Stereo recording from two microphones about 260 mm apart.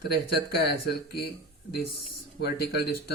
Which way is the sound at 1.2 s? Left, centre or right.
Left.